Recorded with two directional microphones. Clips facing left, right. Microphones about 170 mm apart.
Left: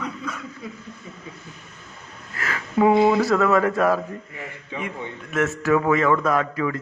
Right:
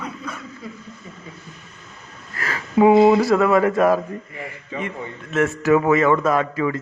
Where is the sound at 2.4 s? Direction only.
35° right (ahead or behind).